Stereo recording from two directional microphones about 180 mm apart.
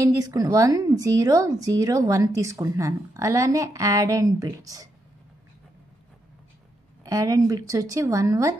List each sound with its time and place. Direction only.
0.0 s speech: 20° right (ahead or behind)
7.1 s a woman's voice: 20° right (ahead or behind)